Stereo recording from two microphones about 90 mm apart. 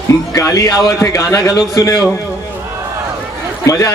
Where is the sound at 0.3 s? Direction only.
40° left (ahead or behind).